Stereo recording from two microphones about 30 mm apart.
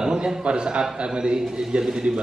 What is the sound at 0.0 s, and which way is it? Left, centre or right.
A man's voice, right.